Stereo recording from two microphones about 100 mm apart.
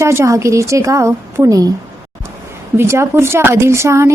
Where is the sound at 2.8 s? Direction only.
25° right (ahead or behind).